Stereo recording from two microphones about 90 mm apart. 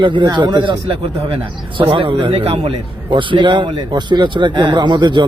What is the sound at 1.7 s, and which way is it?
Speech, 80° right.